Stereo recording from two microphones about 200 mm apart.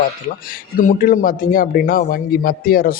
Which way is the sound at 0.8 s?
45° left (ahead or behind).